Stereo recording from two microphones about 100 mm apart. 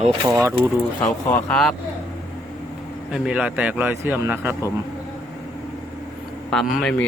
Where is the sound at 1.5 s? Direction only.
5° left (ahead or behind).